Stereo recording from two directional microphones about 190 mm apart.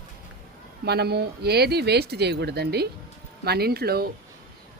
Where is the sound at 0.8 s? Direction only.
60° right (ahead or behind).